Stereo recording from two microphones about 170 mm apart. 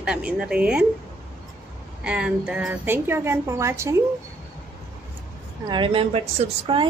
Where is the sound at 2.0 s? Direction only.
5° right (ahead or behind).